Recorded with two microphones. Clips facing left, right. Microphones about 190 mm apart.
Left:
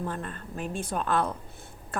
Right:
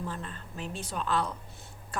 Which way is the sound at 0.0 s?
55° left (ahead or behind).